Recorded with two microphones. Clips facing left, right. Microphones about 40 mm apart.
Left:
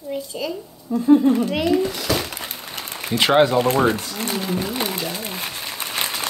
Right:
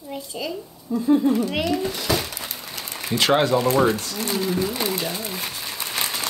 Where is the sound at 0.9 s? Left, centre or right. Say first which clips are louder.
Left 2 dB; left.